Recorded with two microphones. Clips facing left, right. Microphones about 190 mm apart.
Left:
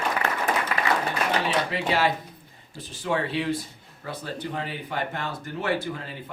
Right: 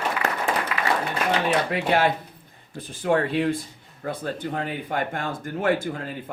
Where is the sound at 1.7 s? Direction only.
55° right (ahead or behind).